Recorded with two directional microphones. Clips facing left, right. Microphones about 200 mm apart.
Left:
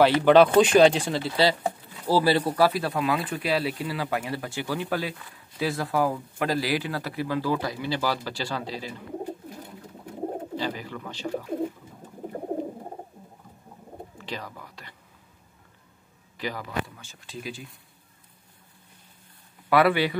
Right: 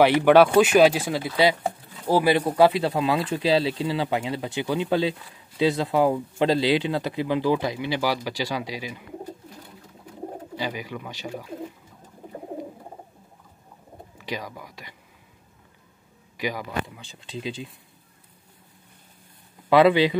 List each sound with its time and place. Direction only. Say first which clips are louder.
0.0 s speech: right 1 dB; 15° right (ahead or behind)
10.5 s speech: even; 10° right (ahead or behind)
14.1 s speech: right 5 dB; 15° right (ahead or behind)
16.3 s speech: right 2 dB; 15° right (ahead or behind)
19.7 s speech: right 4 dB; 20° right (ahead or behind)